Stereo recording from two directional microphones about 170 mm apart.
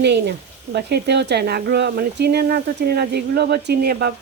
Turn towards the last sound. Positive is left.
turn(degrees=-70)  # may be behind; listen again after turning